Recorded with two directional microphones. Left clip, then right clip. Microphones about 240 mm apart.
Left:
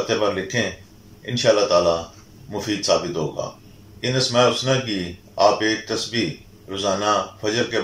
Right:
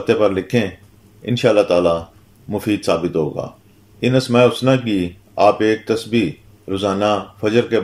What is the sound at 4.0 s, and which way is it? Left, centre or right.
Speech, right.